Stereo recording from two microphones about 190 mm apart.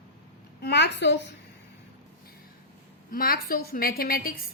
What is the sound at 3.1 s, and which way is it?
A woman's voice, 50° left (ahead or behind).